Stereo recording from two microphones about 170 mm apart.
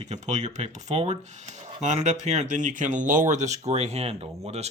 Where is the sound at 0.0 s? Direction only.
45° right (ahead or behind).